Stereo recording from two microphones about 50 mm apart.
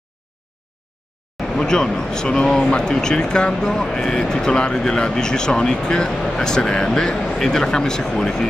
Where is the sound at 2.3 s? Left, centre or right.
Centre.